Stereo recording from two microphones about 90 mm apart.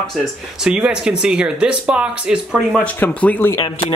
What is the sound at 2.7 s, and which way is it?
Speech, 15° left (ahead or behind).